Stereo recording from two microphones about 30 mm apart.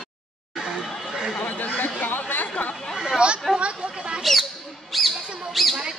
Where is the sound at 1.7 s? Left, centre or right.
Left.